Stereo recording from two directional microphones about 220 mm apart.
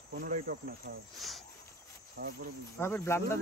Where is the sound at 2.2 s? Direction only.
45° right (ahead or behind).